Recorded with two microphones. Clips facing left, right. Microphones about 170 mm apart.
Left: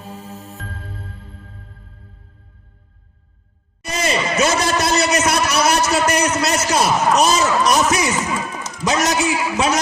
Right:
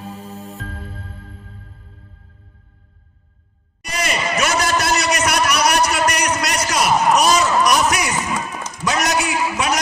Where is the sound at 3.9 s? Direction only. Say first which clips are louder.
Left 2 dB; 25° left (ahead or behind).